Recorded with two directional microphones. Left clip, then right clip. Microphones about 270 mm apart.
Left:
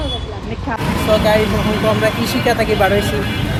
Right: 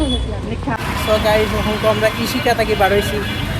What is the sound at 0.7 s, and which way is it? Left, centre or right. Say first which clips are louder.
Speech: left 2 dB; left.